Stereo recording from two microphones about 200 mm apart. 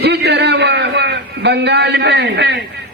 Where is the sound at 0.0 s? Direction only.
55° right (ahead or behind).